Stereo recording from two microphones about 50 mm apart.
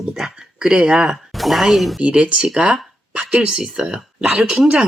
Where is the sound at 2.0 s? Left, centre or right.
Centre.